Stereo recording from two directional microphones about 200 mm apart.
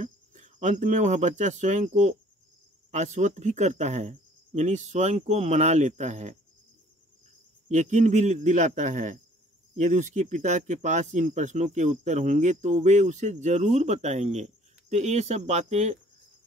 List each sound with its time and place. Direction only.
0.0 s speech: 40° right (ahead or behind)
7.6 s speech: 35° right (ahead or behind)